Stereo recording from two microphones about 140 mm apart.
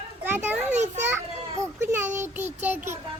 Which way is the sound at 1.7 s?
20° right (ahead or behind).